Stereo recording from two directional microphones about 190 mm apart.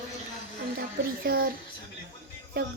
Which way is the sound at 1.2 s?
55° right (ahead or behind).